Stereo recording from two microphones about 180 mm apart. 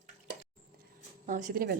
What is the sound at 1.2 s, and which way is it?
Speech, 50° right (ahead or behind).